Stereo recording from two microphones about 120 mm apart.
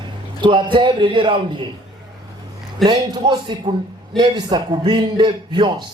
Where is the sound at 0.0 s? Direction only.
40° right (ahead or behind).